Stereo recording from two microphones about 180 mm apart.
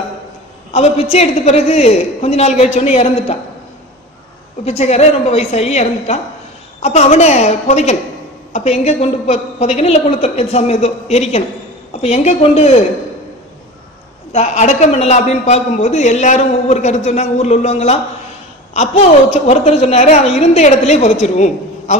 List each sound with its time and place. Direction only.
0.7 s a woman's voice: 35° left (ahead or behind)
4.6 s a man's voice: 35° left (ahead or behind)
14.3 s a man's voice: 35° left (ahead or behind)